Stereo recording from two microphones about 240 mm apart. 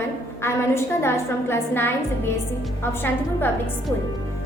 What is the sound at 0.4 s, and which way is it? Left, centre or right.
A woman's voice, centre.